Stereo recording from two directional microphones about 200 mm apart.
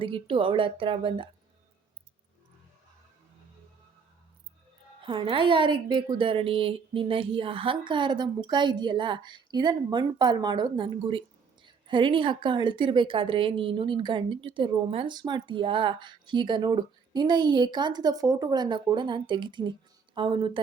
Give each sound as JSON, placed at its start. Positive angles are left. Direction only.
{"t": 0.0, "sound": "speech", "side_deg": -25}
{"t": 5.0, "sound": "speech", "side_deg": -25}